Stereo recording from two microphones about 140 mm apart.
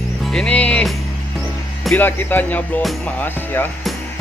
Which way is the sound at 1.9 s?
15° left (ahead or behind).